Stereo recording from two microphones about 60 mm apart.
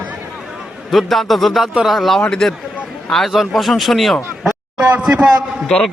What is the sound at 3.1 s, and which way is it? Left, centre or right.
A man's voice, centre.